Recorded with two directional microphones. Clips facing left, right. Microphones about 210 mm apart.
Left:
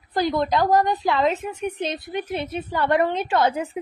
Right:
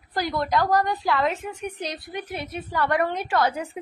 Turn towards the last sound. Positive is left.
turn(degrees=20)  # may be behind; listen again after turning